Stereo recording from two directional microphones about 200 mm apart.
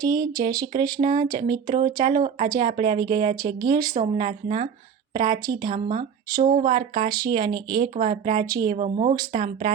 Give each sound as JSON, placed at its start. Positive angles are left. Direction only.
{"t": 0.0, "sound": "speech", "side_deg": -20}
{"t": 3.9, "sound": "speech", "side_deg": -35}
{"t": 6.4, "sound": "speech", "side_deg": -40}
{"t": 6.7, "sound": "speech", "side_deg": -25}
{"t": 7.9, "sound": "speech", "side_deg": -35}
{"t": 8.4, "sound": "speech", "side_deg": -15}
{"t": 8.7, "sound": "speech", "side_deg": -35}